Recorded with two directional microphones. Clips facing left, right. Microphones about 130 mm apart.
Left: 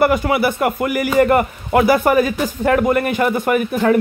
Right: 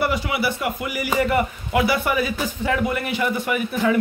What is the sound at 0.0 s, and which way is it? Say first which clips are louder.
Speech: left 7 dB; 50° left (ahead or behind).